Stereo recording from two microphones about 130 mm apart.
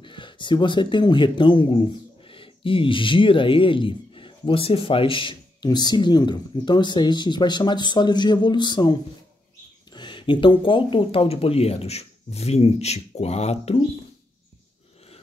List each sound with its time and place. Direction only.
0.0 s speech: 40° left (ahead or behind)
9.9 s speech: 40° left (ahead or behind); by 13.8 s 55° left (ahead or behind)